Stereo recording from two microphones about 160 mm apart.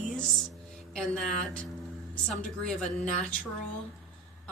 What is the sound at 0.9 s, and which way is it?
Speech, 5° left (ahead or behind).